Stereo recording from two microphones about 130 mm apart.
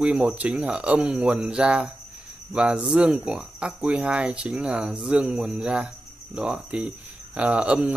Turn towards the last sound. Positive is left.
turn(degrees=-10)  # may be behind; listen again after turning